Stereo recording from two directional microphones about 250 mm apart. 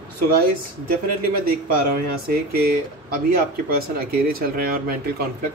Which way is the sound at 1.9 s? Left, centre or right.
Right.